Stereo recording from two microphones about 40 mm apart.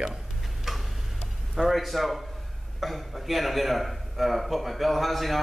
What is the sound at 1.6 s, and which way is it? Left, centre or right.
A man's voice, centre.